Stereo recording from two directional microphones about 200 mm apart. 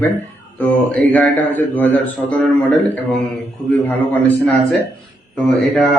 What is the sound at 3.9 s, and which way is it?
Speech, 10° left (ahead or behind).